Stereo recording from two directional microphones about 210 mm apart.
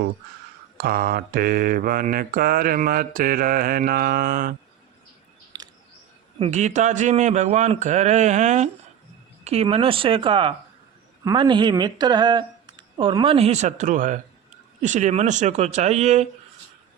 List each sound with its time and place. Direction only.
0.8 s mantra: 45° right (ahead or behind)
5.5 s a sound: 20° right (ahead or behind)
6.4 s a man's voice: 35° right (ahead or behind)